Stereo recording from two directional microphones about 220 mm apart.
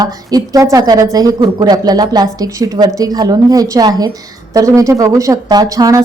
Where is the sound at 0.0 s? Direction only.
15° right (ahead or behind).